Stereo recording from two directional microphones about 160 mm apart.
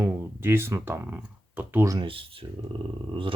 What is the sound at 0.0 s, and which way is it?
Speech, 15° right (ahead or behind).